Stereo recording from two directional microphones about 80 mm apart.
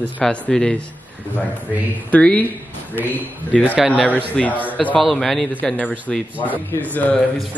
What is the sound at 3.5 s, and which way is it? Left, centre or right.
Speech, centre.